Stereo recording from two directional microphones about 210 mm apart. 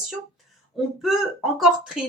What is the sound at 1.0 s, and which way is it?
Speech, centre (ahead or behind).